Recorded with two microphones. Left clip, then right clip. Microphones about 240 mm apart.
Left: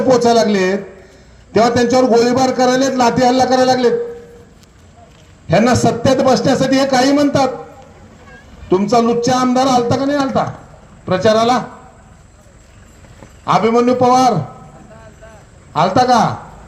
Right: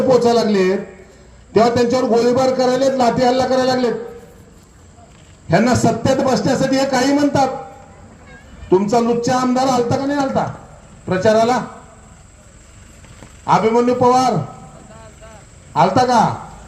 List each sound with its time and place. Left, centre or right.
0.1 s a man's voice: left
5.5 s a man's voice: left
8.7 s a man's voice: left
13.4 s a man's voice: left
15.7 s a man's voice: left